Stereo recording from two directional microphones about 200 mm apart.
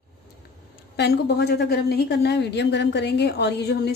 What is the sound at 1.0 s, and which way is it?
A woman's voice, 55° left (ahead or behind).